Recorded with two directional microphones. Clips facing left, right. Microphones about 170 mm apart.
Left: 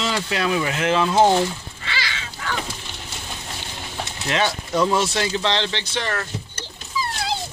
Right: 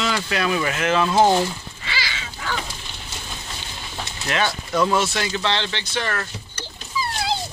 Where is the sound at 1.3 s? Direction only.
5° right (ahead or behind).